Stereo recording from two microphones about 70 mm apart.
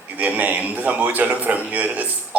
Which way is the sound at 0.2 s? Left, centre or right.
Right.